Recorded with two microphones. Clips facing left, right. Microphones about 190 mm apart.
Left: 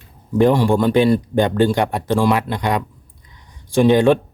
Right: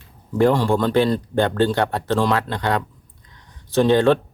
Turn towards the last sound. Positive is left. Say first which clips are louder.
# left 2 dB
turn(degrees=15)  # may be behind; listen again after turning